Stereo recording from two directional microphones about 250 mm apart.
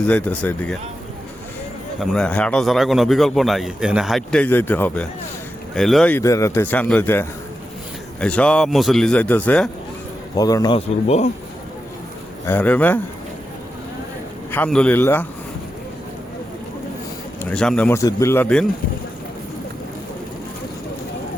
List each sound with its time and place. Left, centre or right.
0.1 s speech: centre
2.0 s a man's voice: centre; by 11.3 s left
12.5 s a man's voice: centre
14.5 s a man's voice: centre
17.4 s a man's voice: centre